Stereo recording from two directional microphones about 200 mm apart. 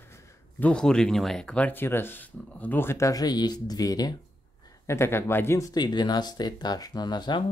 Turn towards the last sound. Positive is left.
turn(degrees=20)  # may be behind; listen again after turning